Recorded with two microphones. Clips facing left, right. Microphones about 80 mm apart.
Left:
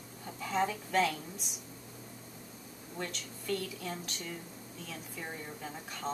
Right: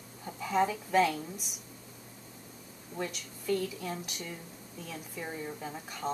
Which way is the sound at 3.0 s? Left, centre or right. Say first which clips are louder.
Right 3 dB; centre.